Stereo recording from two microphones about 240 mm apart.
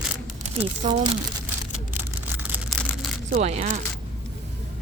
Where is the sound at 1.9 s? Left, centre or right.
Centre.